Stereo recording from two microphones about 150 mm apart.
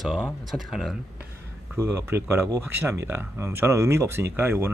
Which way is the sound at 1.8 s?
20° right (ahead or behind).